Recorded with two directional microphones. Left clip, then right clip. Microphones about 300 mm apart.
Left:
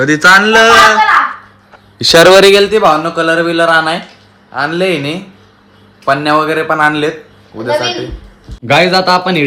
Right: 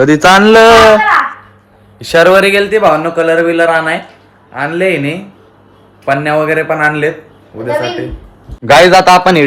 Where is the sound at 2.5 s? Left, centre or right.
Centre.